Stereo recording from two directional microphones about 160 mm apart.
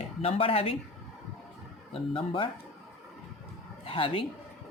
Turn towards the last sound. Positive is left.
turn(degrees=35)  # may be behind; listen again after turning